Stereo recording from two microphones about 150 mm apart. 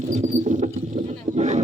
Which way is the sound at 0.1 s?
55° right (ahead or behind).